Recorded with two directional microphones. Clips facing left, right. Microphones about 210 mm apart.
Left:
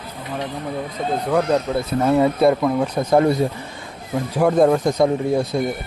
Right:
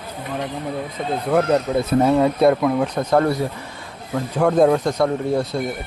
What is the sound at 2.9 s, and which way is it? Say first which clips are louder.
Speech: left 2 dB; 15° left (ahead or behind).